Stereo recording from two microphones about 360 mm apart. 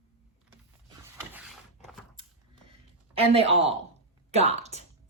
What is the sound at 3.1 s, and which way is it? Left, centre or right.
A woman's voice, centre.